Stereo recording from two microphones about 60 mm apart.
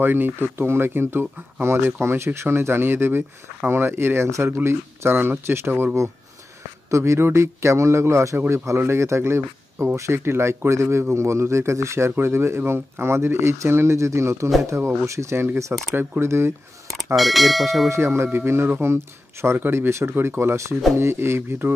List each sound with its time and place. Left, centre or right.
0.0 s speech: right
6.9 s speech: right
8.4 s speech: right
17.1 s speech: centre
17.8 s speech: right
19.6 s speech: right
19.9 s speech: right